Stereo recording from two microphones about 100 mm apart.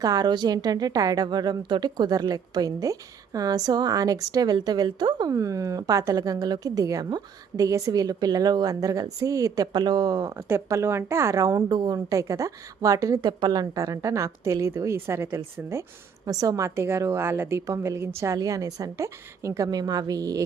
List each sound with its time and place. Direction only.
0.0 s speech: 40° right (ahead or behind)
5.3 s speech: 35° right (ahead or behind)
16.2 s speech: 40° right (ahead or behind)
16.6 s a woman's voice: 25° right (ahead or behind)